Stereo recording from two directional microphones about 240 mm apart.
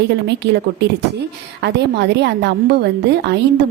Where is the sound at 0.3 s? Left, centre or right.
Right.